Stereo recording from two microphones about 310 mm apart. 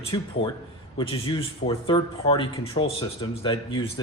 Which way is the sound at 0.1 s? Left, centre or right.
Centre.